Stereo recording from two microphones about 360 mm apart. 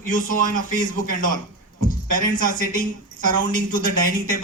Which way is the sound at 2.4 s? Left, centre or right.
Left.